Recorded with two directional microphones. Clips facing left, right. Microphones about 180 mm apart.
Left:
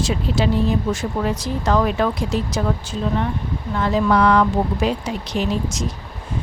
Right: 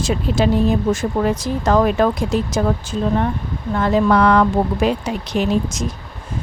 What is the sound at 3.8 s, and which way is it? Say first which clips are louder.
Speech: right 2 dB; 50° right (ahead or behind).